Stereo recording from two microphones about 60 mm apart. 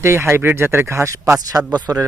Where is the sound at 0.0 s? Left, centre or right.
Right.